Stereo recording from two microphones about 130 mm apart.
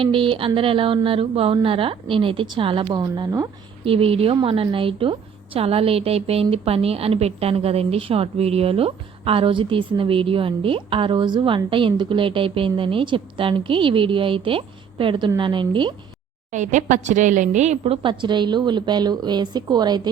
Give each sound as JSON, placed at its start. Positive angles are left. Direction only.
{"t": 0.0, "sound": "a woman's voice", "side_deg": -40}
{"t": 3.0, "sound": "speech", "side_deg": -25}
{"t": 3.8, "sound": "a woman's voice", "side_deg": -45}
{"t": 16.5, "sound": "a woman's voice", "side_deg": -70}